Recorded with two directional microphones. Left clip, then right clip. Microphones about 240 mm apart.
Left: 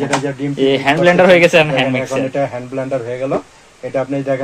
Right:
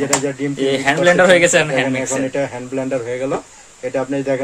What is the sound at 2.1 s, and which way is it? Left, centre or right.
Speech, right.